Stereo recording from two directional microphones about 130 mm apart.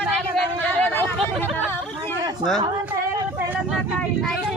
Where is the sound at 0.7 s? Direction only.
15° left (ahead or behind).